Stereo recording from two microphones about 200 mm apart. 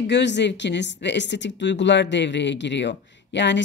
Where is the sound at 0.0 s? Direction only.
60° left (ahead or behind).